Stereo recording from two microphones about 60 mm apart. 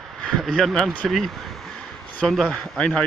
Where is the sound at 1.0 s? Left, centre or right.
Centre.